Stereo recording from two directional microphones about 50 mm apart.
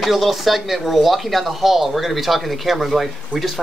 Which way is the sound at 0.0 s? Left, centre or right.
Centre.